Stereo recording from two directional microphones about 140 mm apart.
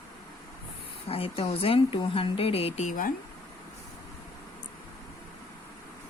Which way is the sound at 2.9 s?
80° left.